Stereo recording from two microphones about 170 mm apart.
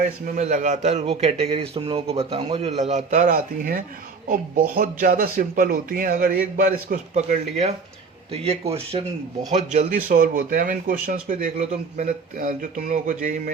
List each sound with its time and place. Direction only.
0.0 s a man's voice: 50° right (ahead or behind)